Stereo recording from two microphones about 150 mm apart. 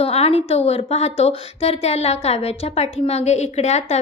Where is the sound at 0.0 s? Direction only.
40° left (ahead or behind).